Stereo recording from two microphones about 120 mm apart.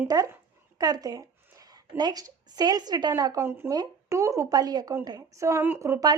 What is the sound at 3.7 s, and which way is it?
A woman's voice, 30° right (ahead or behind).